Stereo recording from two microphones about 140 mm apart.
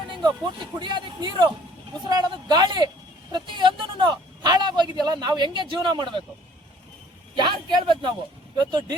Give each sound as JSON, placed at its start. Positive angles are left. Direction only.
{"t": 0.1, "sound": "a man's voice", "side_deg": -30}
{"t": 7.3, "sound": "a man's voice", "side_deg": -35}